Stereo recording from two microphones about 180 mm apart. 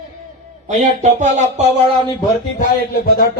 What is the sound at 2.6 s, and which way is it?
Speech, 55° left (ahead or behind).